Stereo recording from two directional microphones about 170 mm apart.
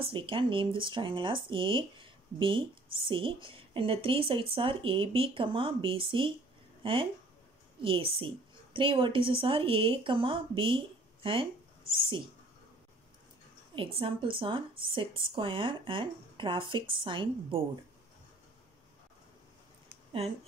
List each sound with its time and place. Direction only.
0.0 s a woman's voice: 30° right (ahead or behind)
11.9 s a woman's voice: 30° right (ahead or behind)
13.7 s a woman's voice: 35° right (ahead or behind)